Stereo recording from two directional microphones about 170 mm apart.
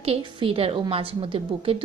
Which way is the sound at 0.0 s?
30° right (ahead or behind).